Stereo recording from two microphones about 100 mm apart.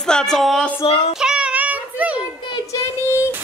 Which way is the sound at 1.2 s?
10° right (ahead or behind).